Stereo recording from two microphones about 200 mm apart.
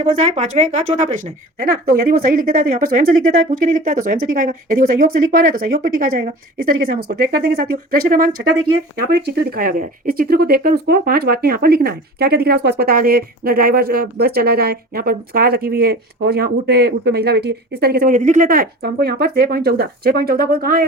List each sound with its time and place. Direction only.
0.0 s speech: 35° right (ahead or behind)